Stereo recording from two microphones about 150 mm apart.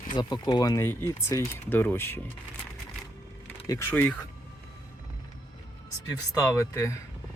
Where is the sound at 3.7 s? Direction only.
15° left (ahead or behind).